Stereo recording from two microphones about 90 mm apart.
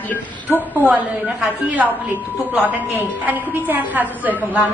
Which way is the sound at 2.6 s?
20° right (ahead or behind).